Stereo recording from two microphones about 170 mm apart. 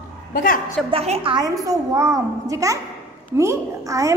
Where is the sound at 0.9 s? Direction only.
35° right (ahead or behind).